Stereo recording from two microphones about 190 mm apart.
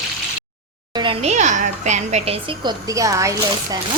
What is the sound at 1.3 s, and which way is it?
A woman's voice, 40° right (ahead or behind).